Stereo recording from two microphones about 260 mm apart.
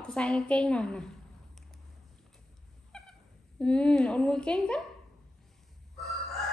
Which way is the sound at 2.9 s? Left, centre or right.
Centre.